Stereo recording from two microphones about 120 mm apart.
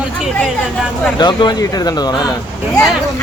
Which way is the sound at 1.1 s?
35° left (ahead or behind).